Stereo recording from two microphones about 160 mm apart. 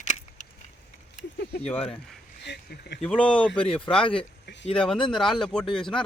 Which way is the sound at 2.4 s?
90° left.